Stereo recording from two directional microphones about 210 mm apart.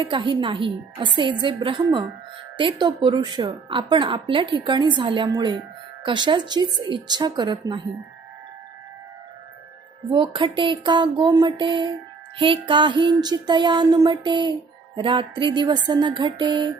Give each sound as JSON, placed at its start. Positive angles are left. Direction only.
{"t": 0.1, "sound": "a woman's voice", "side_deg": -20}
{"t": 10.1, "sound": "a woman's voice", "side_deg": -20}